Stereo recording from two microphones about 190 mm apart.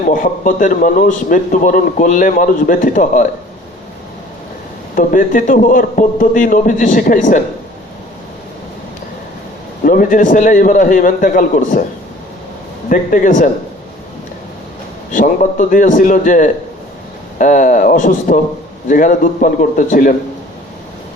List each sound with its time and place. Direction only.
0.1 s a man's voice: 45° left (ahead or behind)
4.9 s a man's voice: 45° left (ahead or behind)
9.8 s a man's voice: 45° left (ahead or behind)
12.9 s a man's voice: 45° left (ahead or behind)
15.1 s a man's voice: 45° left (ahead or behind)